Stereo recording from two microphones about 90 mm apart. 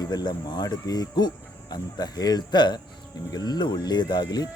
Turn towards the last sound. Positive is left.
turn(degrees=45)  # may be behind; listen again after turning